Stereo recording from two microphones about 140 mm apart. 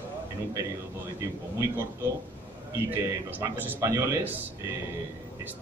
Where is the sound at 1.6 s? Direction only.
15° right (ahead or behind).